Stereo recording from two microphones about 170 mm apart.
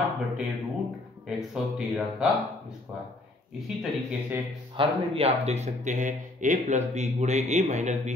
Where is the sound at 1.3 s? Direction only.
Centre (ahead or behind).